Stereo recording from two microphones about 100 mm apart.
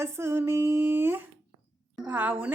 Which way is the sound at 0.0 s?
25° right (ahead or behind).